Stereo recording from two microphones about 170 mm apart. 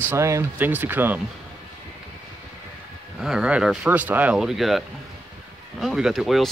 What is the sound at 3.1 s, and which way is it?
Speech, 5° right (ahead or behind).